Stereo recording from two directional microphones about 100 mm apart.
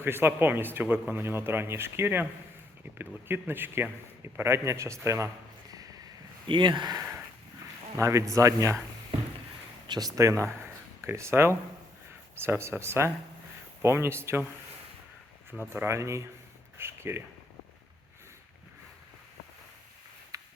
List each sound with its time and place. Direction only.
0.0 s a man's voice: 20° right (ahead or behind)
6.5 s speech: 55° right (ahead or behind)
7.9 s speech: 30° right (ahead or behind)
9.8 s a man's voice: 40° right (ahead or behind); by 14.4 s 25° right (ahead or behind)
15.7 s a man's voice: 25° right (ahead or behind)
16.7 s a sound: 25° right (ahead or behind)
20.3 s a sound: 35° right (ahead or behind)